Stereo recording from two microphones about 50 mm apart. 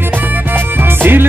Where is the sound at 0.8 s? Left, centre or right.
Right.